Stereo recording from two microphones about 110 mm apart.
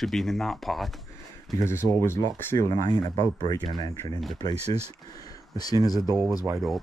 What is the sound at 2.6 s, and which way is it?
Speech, 35° left (ahead or behind).